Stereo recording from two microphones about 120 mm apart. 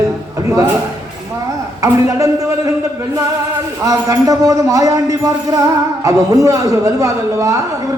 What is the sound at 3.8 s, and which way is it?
A man's voice, 25° right (ahead or behind).